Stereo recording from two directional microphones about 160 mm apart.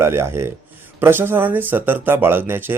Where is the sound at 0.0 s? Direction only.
15° right (ahead or behind).